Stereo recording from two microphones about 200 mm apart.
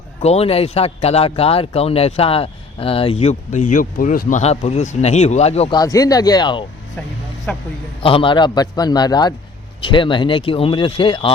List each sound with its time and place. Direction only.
0.2 s a man's voice: 30° left (ahead or behind)
5.7 s speech: 15° left (ahead or behind)
7.5 s a man's voice: 10° left (ahead or behind)
8.0 s speech: 25° left (ahead or behind)